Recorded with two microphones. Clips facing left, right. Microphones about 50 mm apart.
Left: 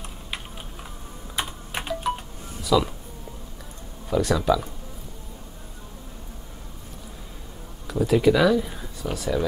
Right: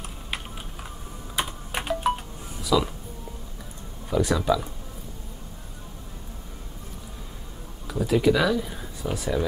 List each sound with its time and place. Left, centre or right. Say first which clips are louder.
1.4 s computer keyboard: right 1 dB; centre
2.1 s a sound: even; centre
4.1 s speech: left 1 dB; centre
7.8 s speech: left 2 dB; centre
9.0 s speech: left 1 dB; centre